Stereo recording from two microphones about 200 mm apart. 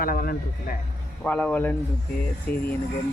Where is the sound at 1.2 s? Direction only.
5° left (ahead or behind).